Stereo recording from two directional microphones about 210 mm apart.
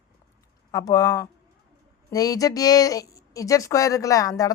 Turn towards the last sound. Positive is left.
turn(degrees=15)  # may be behind; listen again after turning